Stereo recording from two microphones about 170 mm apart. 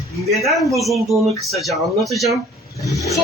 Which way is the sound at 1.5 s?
Centre (ahead or behind).